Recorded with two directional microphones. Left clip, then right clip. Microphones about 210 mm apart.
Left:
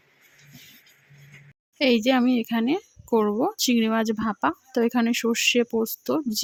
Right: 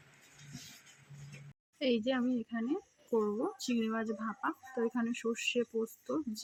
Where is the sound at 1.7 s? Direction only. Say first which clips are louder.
Left 12 dB; 50° left (ahead or behind).